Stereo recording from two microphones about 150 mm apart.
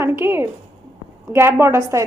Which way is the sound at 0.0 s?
15° right (ahead or behind).